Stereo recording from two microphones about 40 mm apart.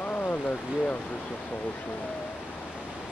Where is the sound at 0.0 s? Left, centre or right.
Left.